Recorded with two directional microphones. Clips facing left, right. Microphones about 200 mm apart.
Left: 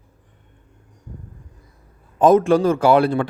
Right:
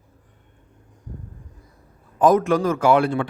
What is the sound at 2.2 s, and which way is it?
Speech, 25° left (ahead or behind).